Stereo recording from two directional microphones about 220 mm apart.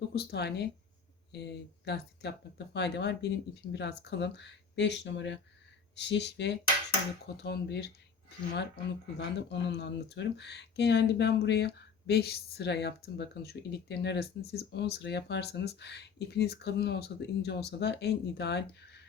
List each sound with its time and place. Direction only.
0.1 s speech: 45° left (ahead or behind)